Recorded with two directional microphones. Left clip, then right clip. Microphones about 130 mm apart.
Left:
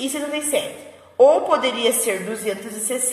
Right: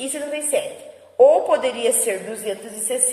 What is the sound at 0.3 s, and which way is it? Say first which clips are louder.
Speech: right 1 dB; 35° left (ahead or behind).